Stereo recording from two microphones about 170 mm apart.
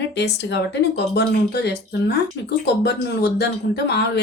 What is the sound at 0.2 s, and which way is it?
Speech, 90° left.